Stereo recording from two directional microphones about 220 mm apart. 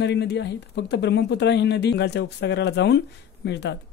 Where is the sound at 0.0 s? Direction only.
50° left (ahead or behind).